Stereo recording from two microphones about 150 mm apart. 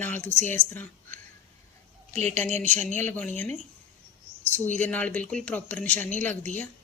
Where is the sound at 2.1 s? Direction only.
50° right (ahead or behind).